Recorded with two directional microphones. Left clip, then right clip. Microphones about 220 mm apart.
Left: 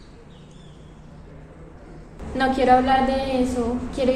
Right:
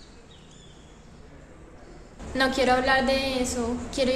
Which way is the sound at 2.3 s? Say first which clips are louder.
Left 5 dB; 25° right (ahead or behind).